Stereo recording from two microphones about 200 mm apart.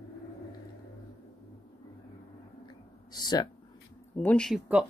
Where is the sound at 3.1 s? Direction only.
20° left (ahead or behind).